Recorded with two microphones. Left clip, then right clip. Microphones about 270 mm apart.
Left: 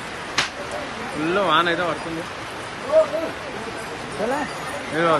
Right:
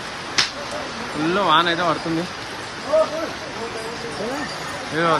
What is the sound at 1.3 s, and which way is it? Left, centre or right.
Speech, centre.